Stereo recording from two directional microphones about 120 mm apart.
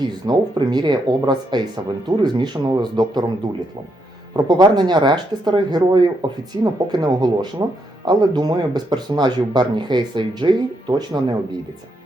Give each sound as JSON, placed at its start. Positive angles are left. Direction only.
{"t": 0.3, "sound": "speech", "side_deg": -35}
{"t": 4.4, "sound": "speech", "side_deg": -35}